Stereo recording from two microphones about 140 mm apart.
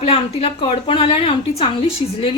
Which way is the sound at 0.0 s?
45° left (ahead or behind).